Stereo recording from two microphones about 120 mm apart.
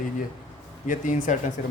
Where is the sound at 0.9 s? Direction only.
90° left.